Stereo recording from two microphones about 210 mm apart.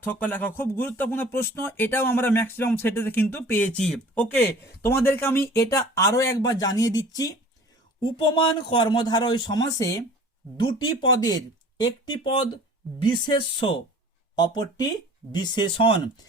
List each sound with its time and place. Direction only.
0.0 s speech: 10° left (ahead or behind)
14.3 s speech: 20° left (ahead or behind)